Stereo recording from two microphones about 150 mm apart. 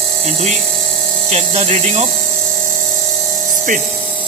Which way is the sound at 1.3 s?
45° right (ahead or behind).